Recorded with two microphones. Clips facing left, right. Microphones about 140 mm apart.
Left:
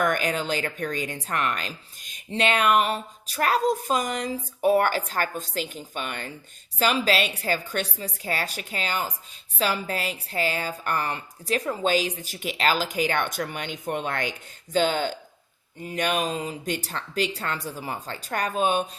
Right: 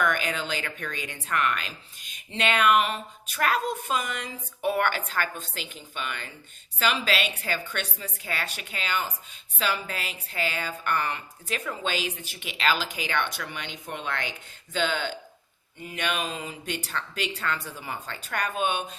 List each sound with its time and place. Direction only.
0.0 s a woman's voice: 45° left (ahead or behind)